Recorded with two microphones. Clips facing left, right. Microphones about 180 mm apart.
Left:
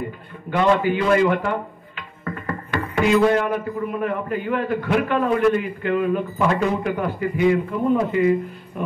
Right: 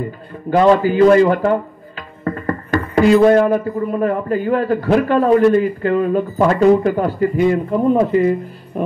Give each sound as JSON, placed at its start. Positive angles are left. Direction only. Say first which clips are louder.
{"t": 0.6, "sound": "speech", "louder": "right 7 dB", "side_deg": -35}